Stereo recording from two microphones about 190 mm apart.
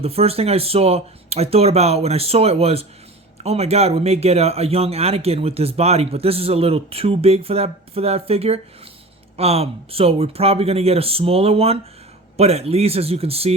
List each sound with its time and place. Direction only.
0.0 s speech: 30° right (ahead or behind)